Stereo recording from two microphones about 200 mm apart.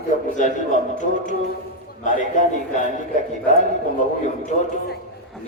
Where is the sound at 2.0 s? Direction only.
40° left (ahead or behind).